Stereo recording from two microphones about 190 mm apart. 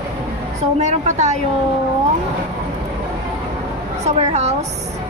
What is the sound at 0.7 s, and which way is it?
Speech, 35° right (ahead or behind).